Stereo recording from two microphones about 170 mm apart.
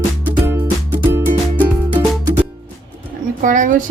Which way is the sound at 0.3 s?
10° right (ahead or behind).